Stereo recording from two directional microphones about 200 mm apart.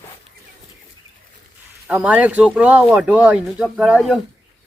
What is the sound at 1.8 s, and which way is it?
Speech, 5° right (ahead or behind).